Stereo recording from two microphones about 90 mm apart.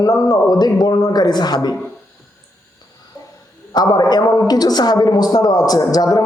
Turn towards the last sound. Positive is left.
turn(degrees=45)  # may be behind; listen again after turning